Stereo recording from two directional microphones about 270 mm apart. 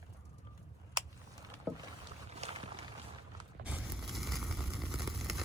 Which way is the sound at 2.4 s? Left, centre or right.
Right.